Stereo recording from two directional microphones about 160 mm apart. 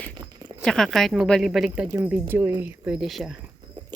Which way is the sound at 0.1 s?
25° right (ahead or behind).